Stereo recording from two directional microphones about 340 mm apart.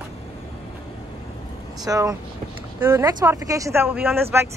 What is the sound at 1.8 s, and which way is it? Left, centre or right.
Speech, centre.